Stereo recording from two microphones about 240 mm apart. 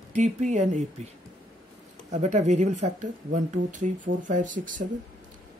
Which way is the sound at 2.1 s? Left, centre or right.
Right.